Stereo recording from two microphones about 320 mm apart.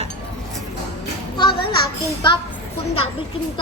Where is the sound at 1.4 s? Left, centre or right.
Centre.